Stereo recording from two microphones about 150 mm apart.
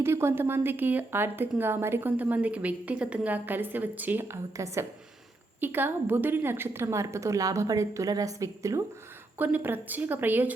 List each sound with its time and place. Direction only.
0.0 s a woman's voice: 15° right (ahead or behind)